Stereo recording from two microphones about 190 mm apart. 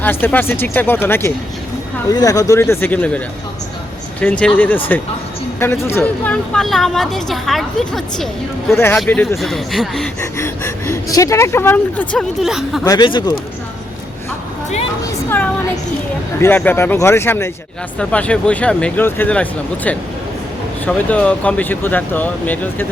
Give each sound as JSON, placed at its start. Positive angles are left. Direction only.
{"t": 0.0, "sound": "speech", "side_deg": 10}
{"t": 4.2, "sound": "a woman's voice", "side_deg": 5}
{"t": 8.7, "sound": "a woman's voice", "side_deg": 10}
{"t": 10.2, "sound": "speech", "side_deg": 15}
{"t": 12.8, "sound": "speech", "side_deg": 20}
{"t": 16.4, "sound": "speech", "side_deg": 10}